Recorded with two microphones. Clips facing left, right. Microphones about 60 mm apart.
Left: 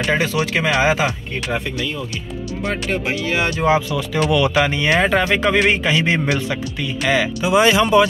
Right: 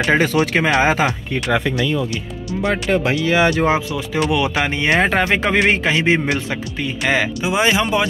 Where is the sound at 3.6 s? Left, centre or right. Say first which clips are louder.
Left 1 dB; right.